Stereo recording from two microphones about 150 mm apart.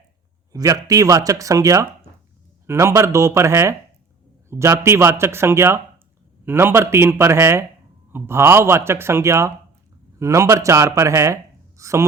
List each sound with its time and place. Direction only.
0.5 s speech: 20° right (ahead or behind)